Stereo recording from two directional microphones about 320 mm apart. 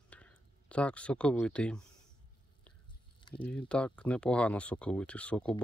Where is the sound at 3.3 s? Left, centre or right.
Centre.